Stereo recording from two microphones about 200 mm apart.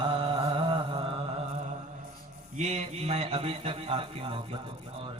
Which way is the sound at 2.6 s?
35° right (ahead or behind).